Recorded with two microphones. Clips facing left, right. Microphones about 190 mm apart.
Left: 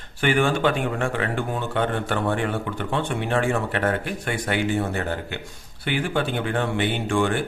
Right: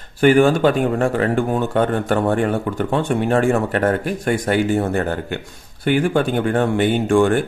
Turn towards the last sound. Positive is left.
turn(degrees=-45)  # may be behind; listen again after turning